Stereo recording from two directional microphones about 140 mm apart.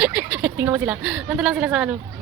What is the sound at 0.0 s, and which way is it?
Speech, 10° right (ahead or behind).